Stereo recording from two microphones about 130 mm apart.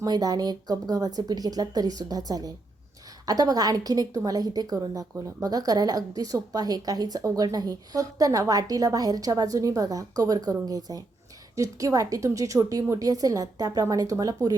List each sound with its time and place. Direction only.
0.0 s a woman's voice: 30° right (ahead or behind)